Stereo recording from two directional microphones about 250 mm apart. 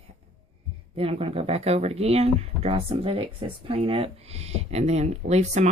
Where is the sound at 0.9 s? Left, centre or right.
Right.